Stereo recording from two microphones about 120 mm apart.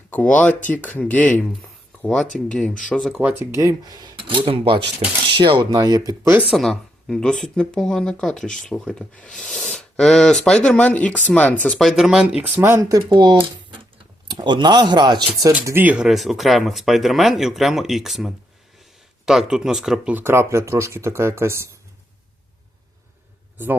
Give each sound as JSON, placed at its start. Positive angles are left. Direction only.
{"t": 0.1, "sound": "speech", "side_deg": 10}
{"t": 3.2, "sound": "speech", "side_deg": -20}
{"t": 6.5, "sound": "speech", "side_deg": 0}
{"t": 11.8, "sound": "speech", "side_deg": 0}
{"t": 15.4, "sound": "speech", "side_deg": -25}
{"t": 15.8, "sound": "speech", "side_deg": -15}
{"t": 16.0, "sound": "speech", "side_deg": 0}